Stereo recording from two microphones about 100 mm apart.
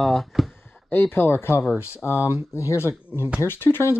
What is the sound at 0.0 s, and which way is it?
Speech, centre (ahead or behind).